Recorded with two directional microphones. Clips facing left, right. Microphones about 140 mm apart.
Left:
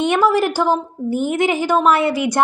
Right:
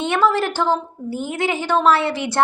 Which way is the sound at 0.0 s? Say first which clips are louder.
Left 3 dB; 15° left (ahead or behind).